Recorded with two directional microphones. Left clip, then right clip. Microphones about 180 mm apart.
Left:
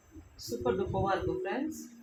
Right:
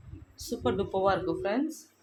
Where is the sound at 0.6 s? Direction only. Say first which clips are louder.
Right 4 dB; 70° right (ahead or behind).